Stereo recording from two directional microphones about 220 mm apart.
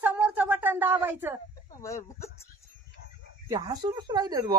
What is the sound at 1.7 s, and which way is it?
Speech, 15° left (ahead or behind).